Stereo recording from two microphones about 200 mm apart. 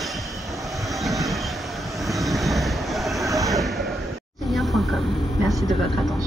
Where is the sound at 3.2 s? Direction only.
15° right (ahead or behind).